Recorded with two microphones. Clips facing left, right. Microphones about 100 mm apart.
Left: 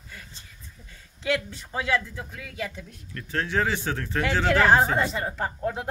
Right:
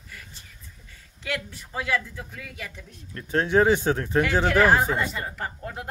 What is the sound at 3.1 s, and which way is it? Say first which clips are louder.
Speech: right 6 dB; 25° right (ahead or behind).